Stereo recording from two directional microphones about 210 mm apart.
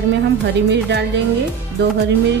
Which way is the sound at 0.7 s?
55° right (ahead or behind).